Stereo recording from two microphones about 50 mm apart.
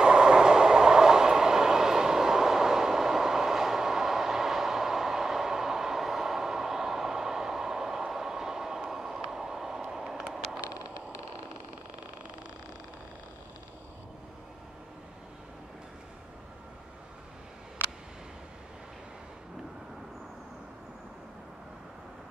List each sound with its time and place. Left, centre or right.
0.0 s train: centre